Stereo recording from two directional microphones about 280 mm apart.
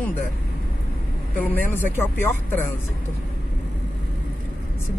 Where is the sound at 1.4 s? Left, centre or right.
Centre.